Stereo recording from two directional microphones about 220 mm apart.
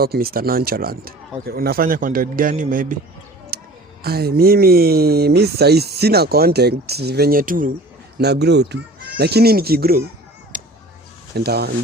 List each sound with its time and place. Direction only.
0.0 s speech: 45° right (ahead or behind)
3.5 s a sound: 45° right (ahead or behind)
4.0 s speech: 45° right (ahead or behind)
8.2 s speech: 50° right (ahead or behind)
10.5 s a sound: 35° right (ahead or behind)
11.3 s speech: 45° right (ahead or behind)